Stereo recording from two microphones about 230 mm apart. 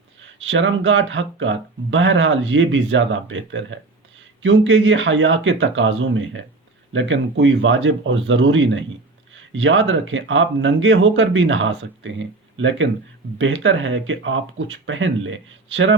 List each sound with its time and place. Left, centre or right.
0.3 s speech: right